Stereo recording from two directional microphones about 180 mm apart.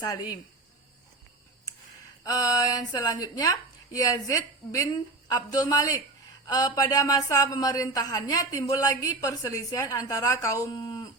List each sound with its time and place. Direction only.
0.0 s speech: 20° left (ahead or behind)
2.2 s a woman's voice: 20° left (ahead or behind)